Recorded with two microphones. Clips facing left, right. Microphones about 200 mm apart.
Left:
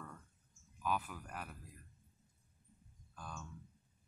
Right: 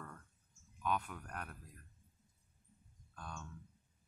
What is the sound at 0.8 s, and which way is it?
Speech, 5° left (ahead or behind).